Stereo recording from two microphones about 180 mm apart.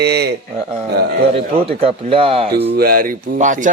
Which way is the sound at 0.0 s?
65° right (ahead or behind).